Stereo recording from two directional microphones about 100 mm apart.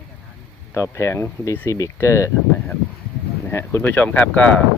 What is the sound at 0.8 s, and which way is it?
Speech, 30° left (ahead or behind).